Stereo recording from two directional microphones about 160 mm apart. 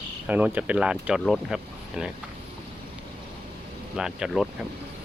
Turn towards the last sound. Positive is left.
turn(degrees=0)  # may be behind; listen again after turning